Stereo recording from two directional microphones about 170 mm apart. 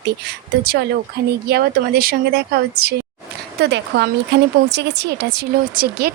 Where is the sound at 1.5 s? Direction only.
65° right (ahead or behind).